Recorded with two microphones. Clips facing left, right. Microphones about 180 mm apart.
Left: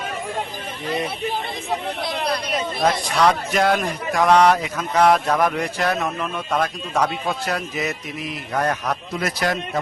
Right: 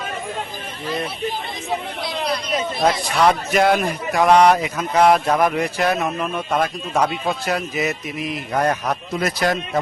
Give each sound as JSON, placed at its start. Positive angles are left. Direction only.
{"t": 2.8, "sound": "a man's voice", "side_deg": -10}